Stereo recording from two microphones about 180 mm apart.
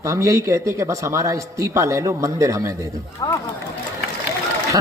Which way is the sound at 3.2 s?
15° left (ahead or behind).